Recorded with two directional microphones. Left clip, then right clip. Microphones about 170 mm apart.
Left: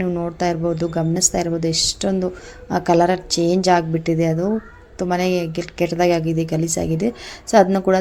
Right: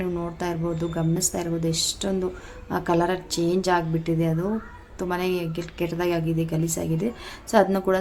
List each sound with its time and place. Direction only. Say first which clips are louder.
0.0 s a woman's voice: left 7 dB; 30° left (ahead or behind)